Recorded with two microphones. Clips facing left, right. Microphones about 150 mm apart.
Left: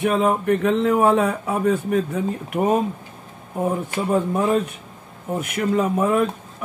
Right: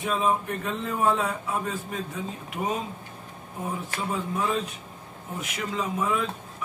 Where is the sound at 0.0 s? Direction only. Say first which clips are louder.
Left 7 dB; 70° left (ahead or behind).